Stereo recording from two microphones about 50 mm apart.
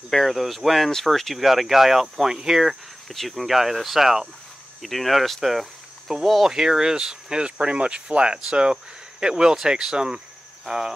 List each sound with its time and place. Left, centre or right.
0.1 s speech: centre